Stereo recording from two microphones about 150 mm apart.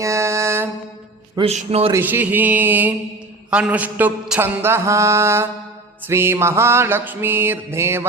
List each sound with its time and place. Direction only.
0.0 s music: 20° right (ahead or behind)
1.4 s a man's voice: 45° right (ahead or behind)
1.9 s a sound: 15° right (ahead or behind)